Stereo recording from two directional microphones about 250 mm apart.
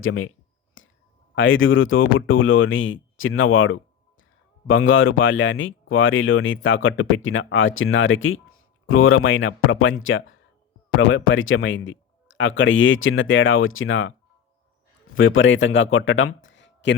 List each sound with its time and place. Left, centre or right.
0.0 s a sound: left
1.4 s speech: left
15.1 s speech: left